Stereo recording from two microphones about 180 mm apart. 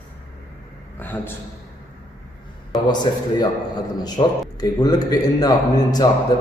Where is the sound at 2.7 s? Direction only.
25° left (ahead or behind).